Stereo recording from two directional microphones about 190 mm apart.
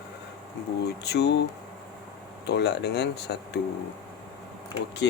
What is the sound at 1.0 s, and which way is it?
Speech, 60° left (ahead or behind).